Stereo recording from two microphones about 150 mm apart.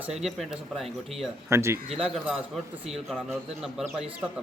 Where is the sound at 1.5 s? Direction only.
20° right (ahead or behind).